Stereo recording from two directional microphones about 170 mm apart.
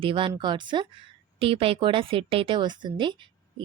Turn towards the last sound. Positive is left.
turn(degrees=-25)  # may be behind; listen again after turning